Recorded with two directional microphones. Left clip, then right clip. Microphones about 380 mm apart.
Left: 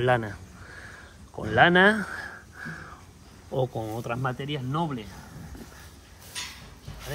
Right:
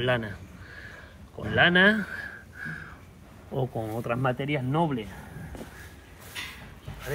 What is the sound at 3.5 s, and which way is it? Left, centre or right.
Speech, centre.